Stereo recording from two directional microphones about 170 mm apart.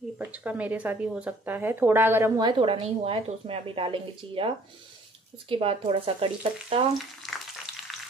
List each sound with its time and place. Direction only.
0.2 s speech: 10° right (ahead or behind)
2.4 s a woman's voice: 30° right (ahead or behind)